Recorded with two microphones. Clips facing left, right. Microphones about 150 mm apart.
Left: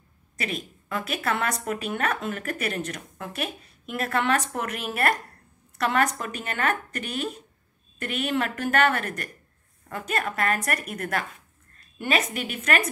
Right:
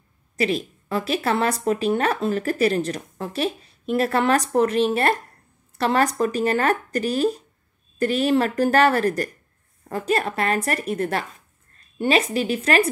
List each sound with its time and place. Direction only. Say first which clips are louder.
0.4 s a woman's voice: right 9 dB; 30° right (ahead or behind)